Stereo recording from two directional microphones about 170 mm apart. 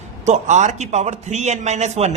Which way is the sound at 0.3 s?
45° right (ahead or behind).